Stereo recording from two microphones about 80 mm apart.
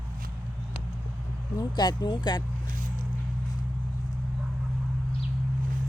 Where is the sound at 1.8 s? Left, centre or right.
Left.